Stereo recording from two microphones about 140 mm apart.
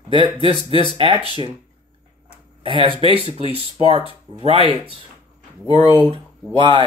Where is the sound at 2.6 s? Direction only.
40° right (ahead or behind).